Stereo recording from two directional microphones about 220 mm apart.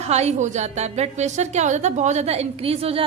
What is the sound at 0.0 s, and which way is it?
A woman's voice, 30° right (ahead or behind).